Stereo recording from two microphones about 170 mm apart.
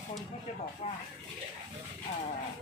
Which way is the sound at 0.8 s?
40° left (ahead or behind).